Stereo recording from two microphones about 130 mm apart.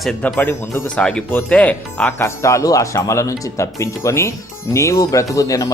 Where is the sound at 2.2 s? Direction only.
20° left (ahead or behind).